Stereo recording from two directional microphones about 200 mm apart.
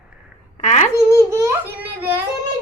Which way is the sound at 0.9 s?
15° right (ahead or behind).